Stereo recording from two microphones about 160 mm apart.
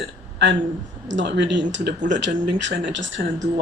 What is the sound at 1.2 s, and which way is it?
Speech, 90° right.